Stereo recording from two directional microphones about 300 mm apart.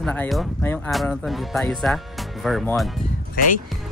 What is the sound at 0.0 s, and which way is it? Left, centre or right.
Speech, centre.